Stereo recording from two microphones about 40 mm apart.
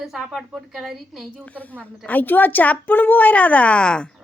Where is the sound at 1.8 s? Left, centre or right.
Left.